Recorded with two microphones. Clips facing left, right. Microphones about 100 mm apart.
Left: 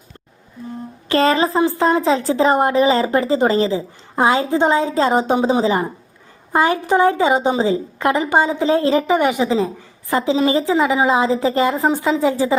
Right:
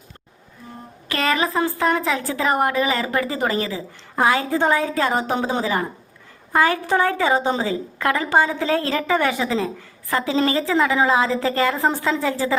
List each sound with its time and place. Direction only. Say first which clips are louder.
1.0 s a woman's voice: left 6 dB; 30° left (ahead or behind)